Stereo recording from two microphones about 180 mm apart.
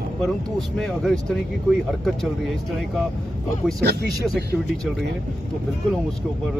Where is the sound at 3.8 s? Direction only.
65° right (ahead or behind).